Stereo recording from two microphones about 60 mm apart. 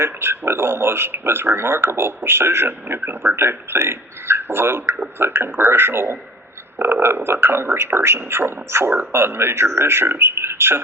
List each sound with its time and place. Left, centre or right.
0.0 s speech: right